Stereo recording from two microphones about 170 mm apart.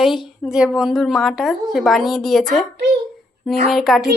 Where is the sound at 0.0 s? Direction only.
Centre (ahead or behind).